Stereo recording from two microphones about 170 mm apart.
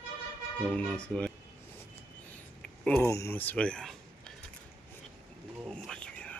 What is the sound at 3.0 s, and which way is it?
Speech, 15° left (ahead or behind).